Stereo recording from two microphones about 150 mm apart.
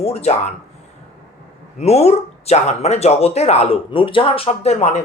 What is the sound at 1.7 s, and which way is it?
Speech, 45° left (ahead or behind).